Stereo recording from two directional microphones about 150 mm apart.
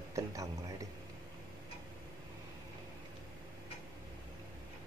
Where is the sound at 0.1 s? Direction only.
20° right (ahead or behind).